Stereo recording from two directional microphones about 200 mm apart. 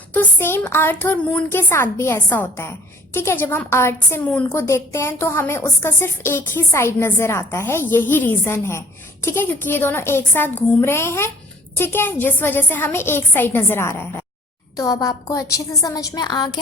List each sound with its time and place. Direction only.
0.1 s a woman's voice: 10° left (ahead or behind)